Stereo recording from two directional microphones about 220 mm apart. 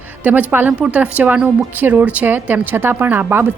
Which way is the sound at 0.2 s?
5° right (ahead or behind).